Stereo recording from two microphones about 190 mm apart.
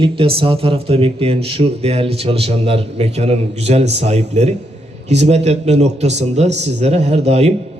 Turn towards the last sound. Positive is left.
turn(degrees=-35)  # may be behind; listen again after turning